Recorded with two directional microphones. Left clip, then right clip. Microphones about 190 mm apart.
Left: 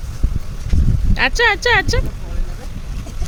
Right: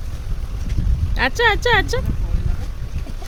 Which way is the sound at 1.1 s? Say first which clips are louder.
Left 2 dB; 5° right (ahead or behind).